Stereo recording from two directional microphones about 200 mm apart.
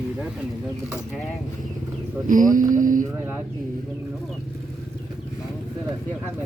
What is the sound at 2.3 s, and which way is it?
Mantra, 40° right (ahead or behind).